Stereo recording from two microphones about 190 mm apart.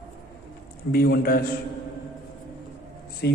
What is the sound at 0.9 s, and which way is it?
Speech, 55° left (ahead or behind).